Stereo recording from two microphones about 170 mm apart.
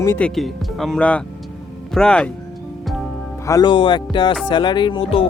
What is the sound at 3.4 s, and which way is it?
Speech, 20° left (ahead or behind).